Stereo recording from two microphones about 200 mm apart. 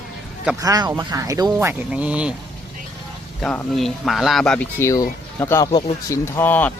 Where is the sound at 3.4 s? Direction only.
5° left (ahead or behind).